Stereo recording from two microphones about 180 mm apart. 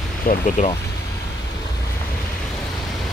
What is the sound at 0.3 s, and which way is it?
Speech, 50° left (ahead or behind).